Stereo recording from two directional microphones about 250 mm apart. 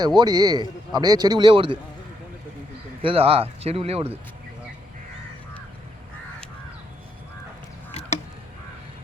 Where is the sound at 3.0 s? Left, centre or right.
Right.